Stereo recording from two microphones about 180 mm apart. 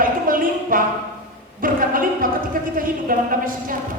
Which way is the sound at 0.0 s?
50° right (ahead or behind).